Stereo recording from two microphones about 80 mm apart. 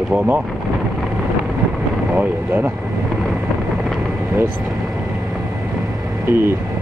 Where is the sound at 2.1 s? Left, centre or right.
Centre.